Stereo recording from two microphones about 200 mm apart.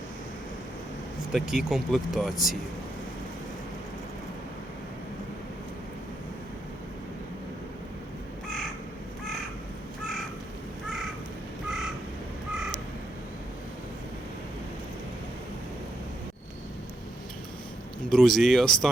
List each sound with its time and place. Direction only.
1.3 s speech: centre (ahead or behind)
18.1 s speech: centre (ahead or behind)